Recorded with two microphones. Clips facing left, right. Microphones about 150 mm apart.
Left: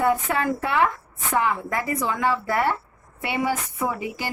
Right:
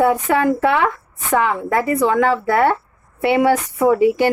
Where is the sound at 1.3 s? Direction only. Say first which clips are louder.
Right 6 dB; 70° right (ahead or behind).